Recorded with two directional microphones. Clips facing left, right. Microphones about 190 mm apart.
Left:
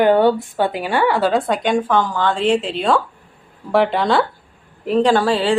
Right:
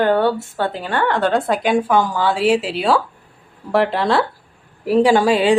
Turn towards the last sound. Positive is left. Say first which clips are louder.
# right 2 dB
turn(degrees=-15)  # may be behind; listen again after turning